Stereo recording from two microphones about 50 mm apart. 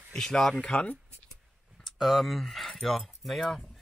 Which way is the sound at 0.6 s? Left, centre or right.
Left.